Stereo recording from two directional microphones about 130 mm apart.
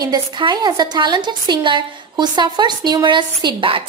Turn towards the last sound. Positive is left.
turn(degrees=-40)  # may be behind; listen again after turning